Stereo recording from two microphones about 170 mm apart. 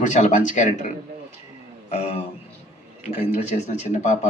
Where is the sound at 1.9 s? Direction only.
40° left (ahead or behind).